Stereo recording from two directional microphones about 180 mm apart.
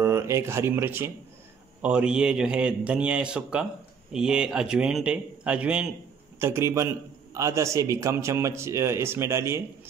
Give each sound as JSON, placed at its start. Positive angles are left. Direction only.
{"t": 0.0, "sound": "a man's voice", "side_deg": -15}